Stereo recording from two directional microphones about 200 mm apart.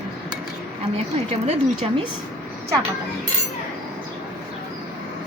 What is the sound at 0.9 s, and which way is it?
Speech, 30° right (ahead or behind).